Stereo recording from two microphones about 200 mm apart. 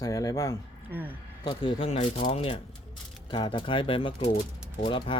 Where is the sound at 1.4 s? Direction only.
25° left (ahead or behind).